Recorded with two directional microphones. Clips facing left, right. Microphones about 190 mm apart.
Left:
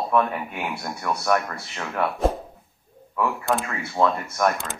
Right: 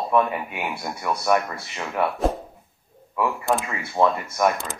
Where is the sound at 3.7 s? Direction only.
15° right (ahead or behind).